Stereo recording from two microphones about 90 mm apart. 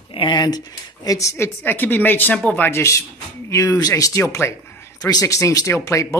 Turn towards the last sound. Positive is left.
turn(degrees=35)  # may be behind; listen again after turning